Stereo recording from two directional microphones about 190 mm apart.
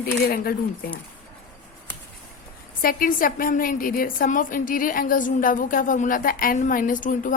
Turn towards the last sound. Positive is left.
turn(degrees=45)  # may be behind; listen again after turning